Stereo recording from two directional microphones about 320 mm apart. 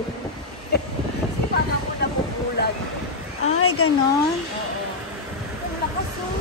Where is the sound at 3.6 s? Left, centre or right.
Left.